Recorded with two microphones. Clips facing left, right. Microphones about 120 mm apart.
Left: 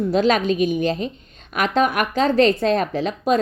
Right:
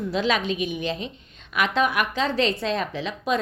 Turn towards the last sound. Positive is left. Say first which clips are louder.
# left 6 dB
turn(degrees=45)  # may be behind; listen again after turning